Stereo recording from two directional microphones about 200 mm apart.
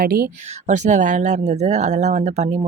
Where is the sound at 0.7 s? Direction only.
35° right (ahead or behind).